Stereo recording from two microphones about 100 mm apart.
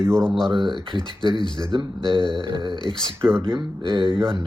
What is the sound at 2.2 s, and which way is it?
Speech, 50° left (ahead or behind).